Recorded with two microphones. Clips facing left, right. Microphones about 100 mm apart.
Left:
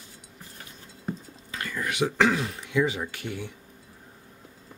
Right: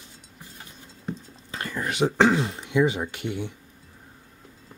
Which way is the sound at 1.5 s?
30° right (ahead or behind).